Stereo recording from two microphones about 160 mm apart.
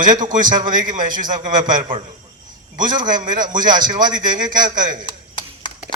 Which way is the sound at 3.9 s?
25° right (ahead or behind).